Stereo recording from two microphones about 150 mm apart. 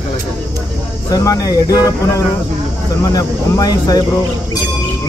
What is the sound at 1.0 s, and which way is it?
Speech, 25° left (ahead or behind).